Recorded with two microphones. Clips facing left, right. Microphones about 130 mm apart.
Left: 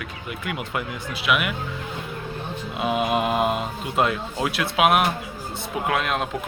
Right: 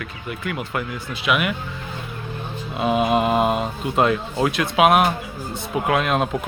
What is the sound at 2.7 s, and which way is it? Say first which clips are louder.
Speech: right 4 dB; 5° left (ahead or behind).